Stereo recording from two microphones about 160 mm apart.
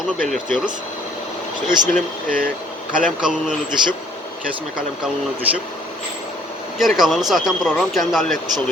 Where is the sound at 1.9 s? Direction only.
60° right (ahead or behind).